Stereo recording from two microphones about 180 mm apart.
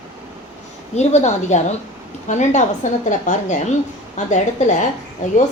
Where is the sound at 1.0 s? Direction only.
40° left (ahead or behind).